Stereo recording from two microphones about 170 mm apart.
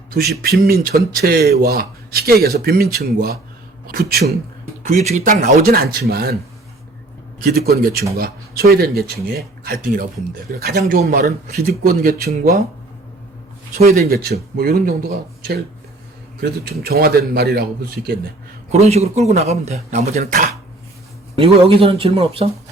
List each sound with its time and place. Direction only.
0.4 s speech: 65° right (ahead or behind)
4.9 s speech: 45° right (ahead or behind); by 6.3 s 65° right (ahead or behind)
7.4 s speech: 65° right (ahead or behind)
13.7 s a man's voice: 60° right (ahead or behind)
18.7 s speech: 40° right (ahead or behind)
21.3 s speech: 35° right (ahead or behind)